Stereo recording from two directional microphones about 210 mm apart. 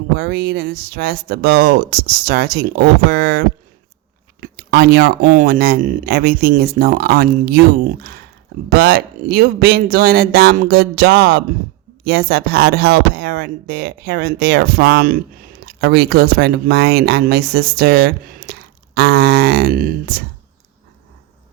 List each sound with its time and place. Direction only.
0.2 s speech: 50° right (ahead or behind)